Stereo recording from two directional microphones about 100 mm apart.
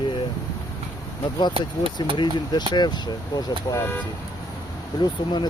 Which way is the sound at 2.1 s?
45° left (ahead or behind).